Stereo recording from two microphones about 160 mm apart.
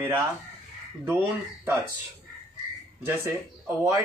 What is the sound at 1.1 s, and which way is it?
Speech, 15° right (ahead or behind).